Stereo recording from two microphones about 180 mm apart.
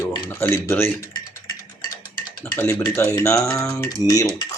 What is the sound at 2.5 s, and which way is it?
Speech, 15° left (ahead or behind).